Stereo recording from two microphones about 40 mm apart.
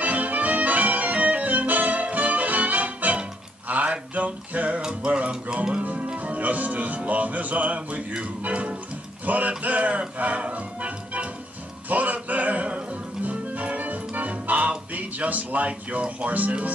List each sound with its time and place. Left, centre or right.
0.0 s music: right
3.6 s a sound: right
4.8 s music: right
5.8 s speech: right
7.1 s music: right
9.2 s music: right
15.0 s speech: right